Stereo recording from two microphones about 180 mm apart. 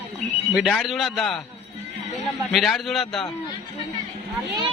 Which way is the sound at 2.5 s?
Centre (ahead or behind).